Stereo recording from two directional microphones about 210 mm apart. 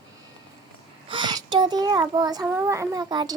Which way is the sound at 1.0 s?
20° right (ahead or behind).